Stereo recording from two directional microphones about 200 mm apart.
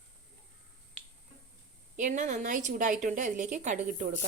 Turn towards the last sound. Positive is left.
turn(degrees=-35)  # may be behind; listen again after turning